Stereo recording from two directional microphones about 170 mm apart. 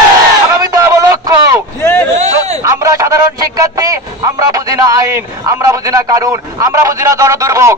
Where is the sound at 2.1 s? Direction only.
40° right (ahead or behind).